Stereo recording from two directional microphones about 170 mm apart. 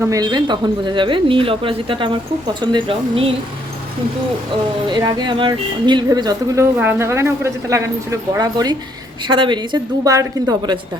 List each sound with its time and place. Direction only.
0.0 s a woman's voice: 20° right (ahead or behind)
4.9 s a woman's voice: 25° right (ahead or behind)